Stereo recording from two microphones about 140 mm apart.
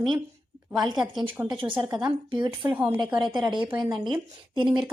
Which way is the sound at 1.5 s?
35° right (ahead or behind).